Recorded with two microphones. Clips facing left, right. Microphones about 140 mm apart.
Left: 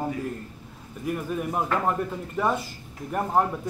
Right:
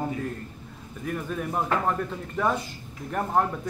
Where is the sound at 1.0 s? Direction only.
10° left (ahead or behind).